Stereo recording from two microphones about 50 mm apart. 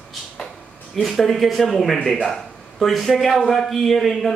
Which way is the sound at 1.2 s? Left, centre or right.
Centre.